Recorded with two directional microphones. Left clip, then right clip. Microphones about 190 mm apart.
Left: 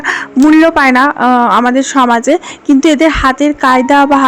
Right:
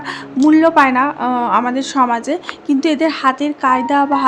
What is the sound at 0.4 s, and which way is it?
Speech, 35° left (ahead or behind).